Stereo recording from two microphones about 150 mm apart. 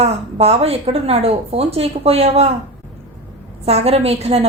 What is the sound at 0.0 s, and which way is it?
A woman's voice, 40° right (ahead or behind).